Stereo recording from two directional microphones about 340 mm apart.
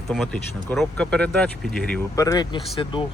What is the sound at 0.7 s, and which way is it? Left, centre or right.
Speech, centre.